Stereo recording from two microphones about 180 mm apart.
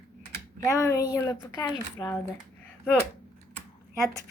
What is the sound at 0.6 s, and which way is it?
A woman's voice, 15° left (ahead or behind).